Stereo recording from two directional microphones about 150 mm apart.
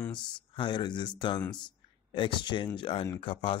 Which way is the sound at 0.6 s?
30° left (ahead or behind).